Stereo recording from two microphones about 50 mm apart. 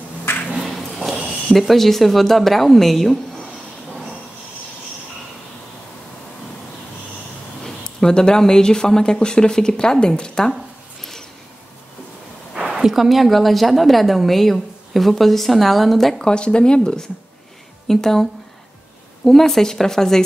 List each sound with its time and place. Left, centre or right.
0.6 s a sound: centre
1.5 s a woman's voice: centre
7.6 s speech: centre
12.7 s a woman's voice: centre
16.2 s a woman's voice: centre